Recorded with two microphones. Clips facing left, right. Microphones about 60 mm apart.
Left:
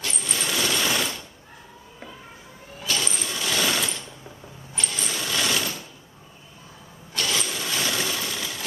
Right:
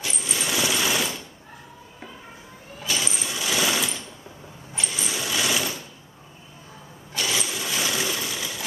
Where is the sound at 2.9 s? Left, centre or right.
Centre.